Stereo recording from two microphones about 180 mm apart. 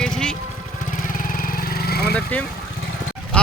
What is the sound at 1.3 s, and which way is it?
Vehicle, 50° left (ahead or behind).